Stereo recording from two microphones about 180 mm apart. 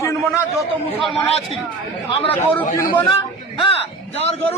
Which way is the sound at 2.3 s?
10° left (ahead or behind).